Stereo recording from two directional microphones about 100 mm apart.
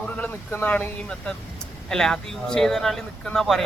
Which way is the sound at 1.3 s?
5° left (ahead or behind).